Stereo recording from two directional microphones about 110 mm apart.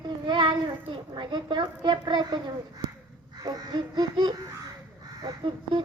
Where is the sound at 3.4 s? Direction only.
40° right (ahead or behind).